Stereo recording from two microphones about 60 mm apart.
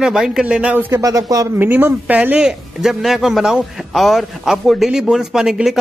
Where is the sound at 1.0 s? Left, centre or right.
Right.